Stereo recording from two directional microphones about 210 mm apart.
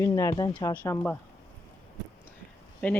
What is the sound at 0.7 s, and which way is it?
Speech, 5° left (ahead or behind).